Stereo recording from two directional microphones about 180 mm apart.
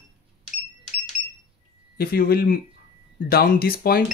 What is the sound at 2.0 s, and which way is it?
Speech, 55° left (ahead or behind).